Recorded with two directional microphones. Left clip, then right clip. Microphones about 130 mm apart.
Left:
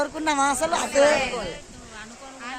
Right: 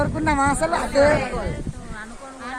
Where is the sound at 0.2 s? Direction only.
5° left (ahead or behind).